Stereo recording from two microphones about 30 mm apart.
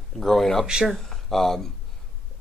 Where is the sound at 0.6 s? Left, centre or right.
Right.